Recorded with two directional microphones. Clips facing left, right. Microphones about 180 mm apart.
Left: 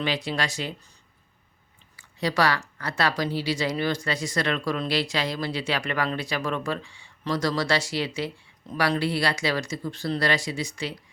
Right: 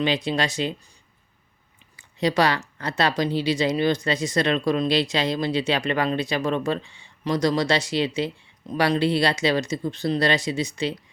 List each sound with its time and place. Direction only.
0.3 s speech: 20° right (ahead or behind)
2.0 s speech: 20° right (ahead or behind)